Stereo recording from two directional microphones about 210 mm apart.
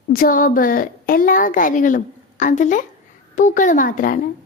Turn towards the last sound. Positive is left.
turn(degrees=40)  # may be behind; listen again after turning